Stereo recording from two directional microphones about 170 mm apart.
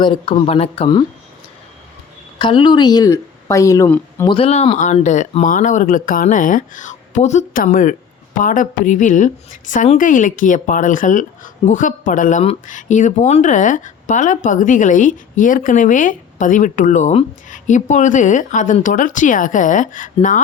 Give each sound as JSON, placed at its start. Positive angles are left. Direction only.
{"t": 0.0, "sound": "speech", "side_deg": 30}
{"t": 2.4, "sound": "a woman's voice", "side_deg": 30}
{"t": 4.3, "sound": "a woman's voice", "side_deg": 35}